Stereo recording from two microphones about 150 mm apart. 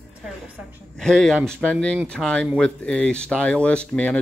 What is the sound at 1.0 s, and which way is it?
Speech, 5° left (ahead or behind).